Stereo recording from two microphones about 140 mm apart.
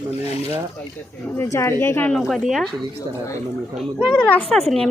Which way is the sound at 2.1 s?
Centre (ahead or behind).